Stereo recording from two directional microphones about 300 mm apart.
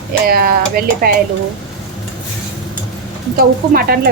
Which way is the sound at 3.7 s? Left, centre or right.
Right.